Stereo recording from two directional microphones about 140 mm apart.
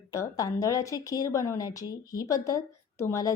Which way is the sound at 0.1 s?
25° left (ahead or behind).